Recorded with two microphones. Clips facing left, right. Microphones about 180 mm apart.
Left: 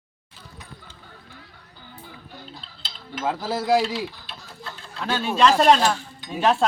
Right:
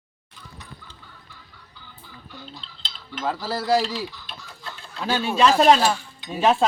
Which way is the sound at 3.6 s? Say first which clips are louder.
Left 1 dB; centre (ahead or behind).